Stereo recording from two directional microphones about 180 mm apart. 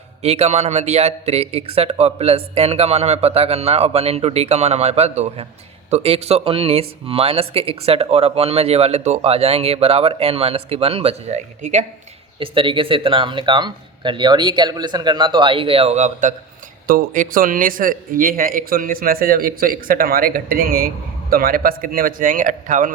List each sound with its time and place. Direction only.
0.2 s speech: 35° right (ahead or behind)
12.4 s speech: 30° right (ahead or behind); by 22.9 s 45° right (ahead or behind)